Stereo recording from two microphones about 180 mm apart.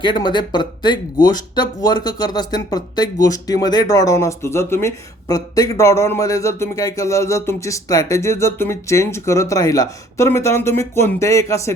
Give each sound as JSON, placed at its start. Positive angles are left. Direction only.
{"t": 0.0, "sound": "speech", "side_deg": 25}